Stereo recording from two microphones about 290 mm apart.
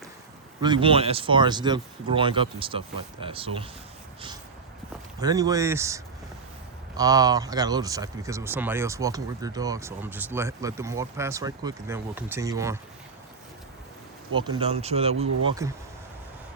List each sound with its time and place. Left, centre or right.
0.6 s speech: centre
5.2 s speech: centre
14.3 s speech: centre